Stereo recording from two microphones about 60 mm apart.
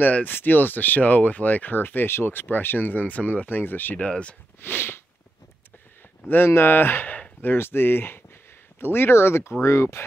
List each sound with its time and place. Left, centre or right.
0.0 s speech: left
4.1 s speech: centre
4.6 s sniff: left
6.2 s speech: left
7.5 s speech: left